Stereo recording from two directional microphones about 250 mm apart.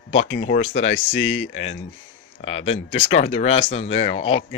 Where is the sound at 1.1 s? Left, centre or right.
Left.